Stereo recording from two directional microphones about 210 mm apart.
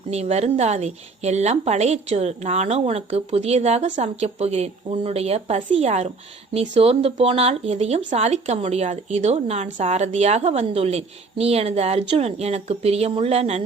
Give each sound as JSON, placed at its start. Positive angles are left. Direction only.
{"t": 0.1, "sound": "a woman's voice", "side_deg": -30}